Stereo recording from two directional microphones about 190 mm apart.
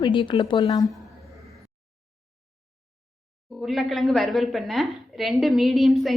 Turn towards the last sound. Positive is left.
turn(degrees=0)  # may be behind; listen again after turning